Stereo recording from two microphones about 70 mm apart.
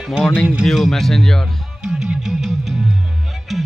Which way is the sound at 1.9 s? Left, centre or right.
Centre.